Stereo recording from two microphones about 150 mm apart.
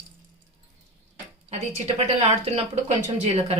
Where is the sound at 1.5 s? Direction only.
50° right (ahead or behind).